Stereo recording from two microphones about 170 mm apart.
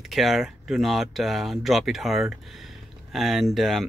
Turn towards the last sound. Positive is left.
turn(degrees=0)  # may be behind; listen again after turning